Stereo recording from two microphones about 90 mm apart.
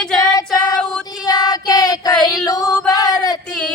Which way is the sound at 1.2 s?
45° left (ahead or behind).